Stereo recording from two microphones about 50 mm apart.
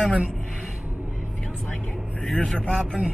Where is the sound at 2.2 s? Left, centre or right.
Centre.